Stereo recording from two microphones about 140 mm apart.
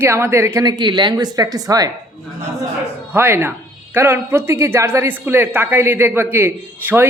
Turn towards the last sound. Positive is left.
turn(degrees=-15)  # may be behind; listen again after turning